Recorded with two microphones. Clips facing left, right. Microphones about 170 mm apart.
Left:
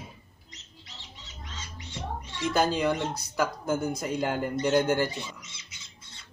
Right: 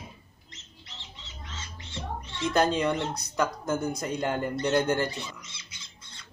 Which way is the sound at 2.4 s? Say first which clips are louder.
Right 1 dB; 5° left (ahead or behind).